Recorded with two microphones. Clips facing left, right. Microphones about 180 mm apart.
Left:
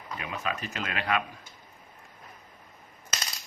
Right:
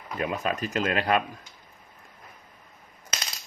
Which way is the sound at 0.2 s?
45° right (ahead or behind).